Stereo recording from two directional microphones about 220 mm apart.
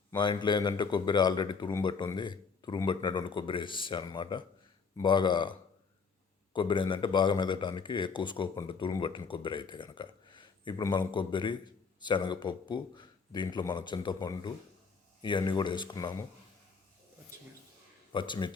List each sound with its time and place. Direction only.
0.1 s speech: 20° left (ahead or behind)
18.1 s speech: 20° left (ahead or behind)